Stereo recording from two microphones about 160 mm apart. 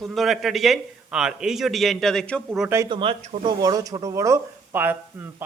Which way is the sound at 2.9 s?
35° right (ahead or behind).